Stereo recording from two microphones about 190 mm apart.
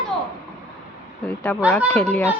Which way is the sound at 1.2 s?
10° left (ahead or behind).